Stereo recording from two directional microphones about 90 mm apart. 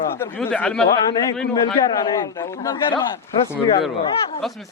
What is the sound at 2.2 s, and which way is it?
Speech, 45° left (ahead or behind).